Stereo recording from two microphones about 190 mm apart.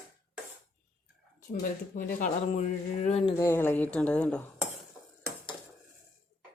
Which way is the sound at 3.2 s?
15° left (ahead or behind).